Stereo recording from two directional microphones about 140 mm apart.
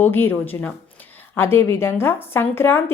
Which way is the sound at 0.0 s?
15° left (ahead or behind).